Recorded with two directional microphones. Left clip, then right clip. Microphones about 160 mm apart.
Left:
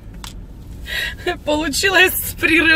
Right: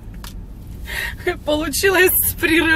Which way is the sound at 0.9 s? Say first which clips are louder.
Left 1 dB; 25° left (ahead or behind).